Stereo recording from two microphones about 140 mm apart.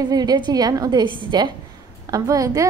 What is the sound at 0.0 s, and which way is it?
A woman's voice, 30° right (ahead or behind).